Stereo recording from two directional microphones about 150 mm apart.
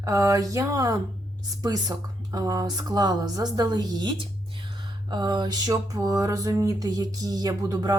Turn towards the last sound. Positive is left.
turn(degrees=-25)  # may be behind; listen again after turning